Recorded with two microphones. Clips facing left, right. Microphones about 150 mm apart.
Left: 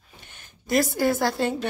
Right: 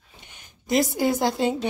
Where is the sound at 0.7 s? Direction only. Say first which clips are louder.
Even; 20° right (ahead or behind).